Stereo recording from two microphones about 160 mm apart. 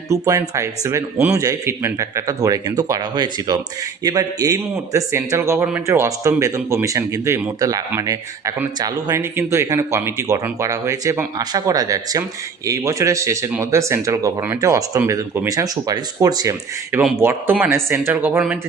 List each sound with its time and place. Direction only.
0.1 s speech: 20° right (ahead or behind)